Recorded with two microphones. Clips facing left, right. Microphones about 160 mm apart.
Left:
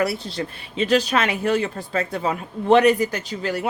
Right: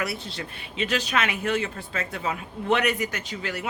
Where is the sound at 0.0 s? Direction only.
35° left (ahead or behind).